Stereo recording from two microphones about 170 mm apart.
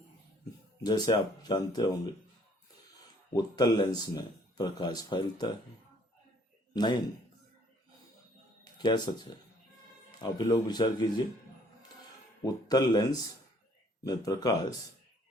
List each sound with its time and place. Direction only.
0.8 s speech: 25° left (ahead or behind)
3.3 s speech: 25° left (ahead or behind)
6.7 s speech: 25° left (ahead or behind)
8.6 s speech: 25° left (ahead or behind)
12.5 s speech: 25° left (ahead or behind)